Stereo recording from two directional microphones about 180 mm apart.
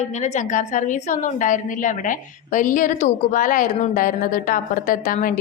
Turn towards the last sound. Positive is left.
turn(degrees=50)  # may be behind; listen again after turning